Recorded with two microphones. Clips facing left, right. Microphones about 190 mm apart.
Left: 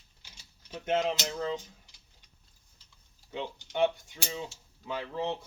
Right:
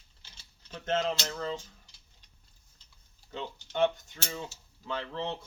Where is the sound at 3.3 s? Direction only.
15° left (ahead or behind).